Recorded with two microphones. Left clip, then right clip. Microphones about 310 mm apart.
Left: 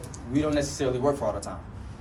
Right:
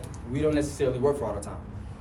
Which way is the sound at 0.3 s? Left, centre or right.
Centre.